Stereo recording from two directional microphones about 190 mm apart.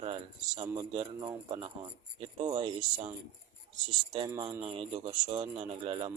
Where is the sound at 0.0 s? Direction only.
25° right (ahead or behind).